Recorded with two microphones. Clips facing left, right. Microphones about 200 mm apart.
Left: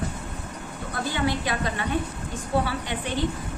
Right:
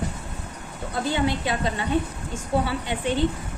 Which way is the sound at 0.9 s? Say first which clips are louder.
Right 2 dB; 25° right (ahead or behind).